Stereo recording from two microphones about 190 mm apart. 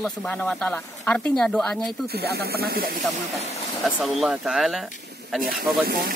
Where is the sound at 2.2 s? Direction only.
55° right (ahead or behind).